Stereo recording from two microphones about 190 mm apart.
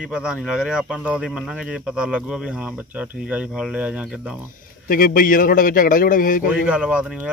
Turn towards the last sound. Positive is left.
turn(degrees=-5)  # may be behind; listen again after turning